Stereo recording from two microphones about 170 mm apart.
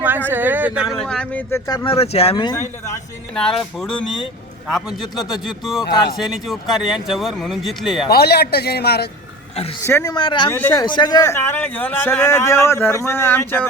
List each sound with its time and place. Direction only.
0.3 s speech: 10° right (ahead or behind)
1.0 s a man's voice: 5° left (ahead or behind)
1.8 s speech: 35° left (ahead or behind)
2.3 s speech: 25° left (ahead or behind)
3.3 s speech: centre (ahead or behind)
5.5 s speech: centre (ahead or behind)
8.1 s a man's voice: 70° left (ahead or behind)
9.8 s speech: 20° left (ahead or behind)
10.5 s a man's voice: 10° left (ahead or behind)
10.8 s a man's voice: 25° left (ahead or behind)